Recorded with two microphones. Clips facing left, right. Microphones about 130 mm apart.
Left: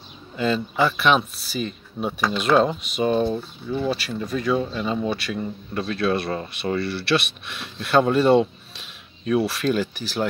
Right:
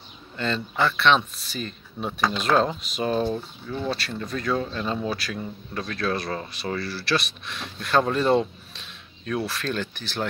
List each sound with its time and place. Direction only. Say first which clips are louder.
0.4 s speech: left 4 dB; 10° left (ahead or behind)